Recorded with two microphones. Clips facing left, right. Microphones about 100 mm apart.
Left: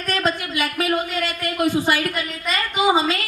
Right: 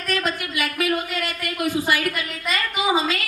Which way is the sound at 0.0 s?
25° left (ahead or behind).